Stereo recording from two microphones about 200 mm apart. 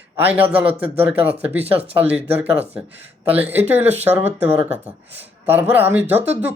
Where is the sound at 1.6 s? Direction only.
30° right (ahead or behind).